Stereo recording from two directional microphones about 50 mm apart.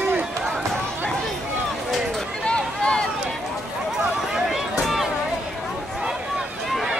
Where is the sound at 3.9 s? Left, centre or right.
Centre.